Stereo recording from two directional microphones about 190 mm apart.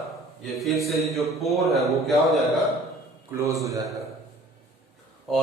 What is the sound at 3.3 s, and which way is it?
Speech, 15° right (ahead or behind).